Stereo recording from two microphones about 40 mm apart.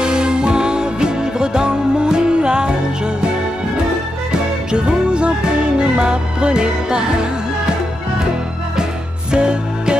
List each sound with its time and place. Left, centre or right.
0.0 s music: right
4.3 s music: right
9.3 s music: right